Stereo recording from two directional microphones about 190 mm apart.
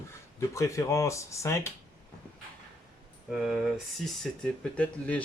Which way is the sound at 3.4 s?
Centre (ahead or behind).